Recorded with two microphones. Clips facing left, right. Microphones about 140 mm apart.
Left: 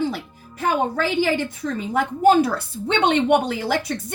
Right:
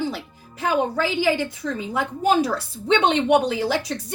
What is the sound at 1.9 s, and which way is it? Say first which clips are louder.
A woman's voice: left 5 dB; 55° left (ahead or behind).